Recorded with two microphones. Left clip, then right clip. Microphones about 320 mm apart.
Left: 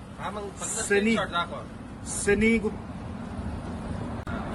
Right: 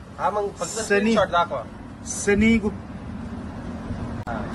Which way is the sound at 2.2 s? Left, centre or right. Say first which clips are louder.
Right 3 dB; right.